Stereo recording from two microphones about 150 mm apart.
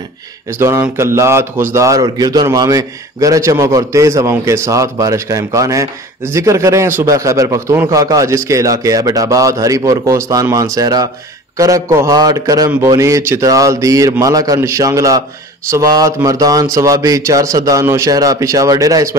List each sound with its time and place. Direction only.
0.5 s a man's voice: 15° right (ahead or behind)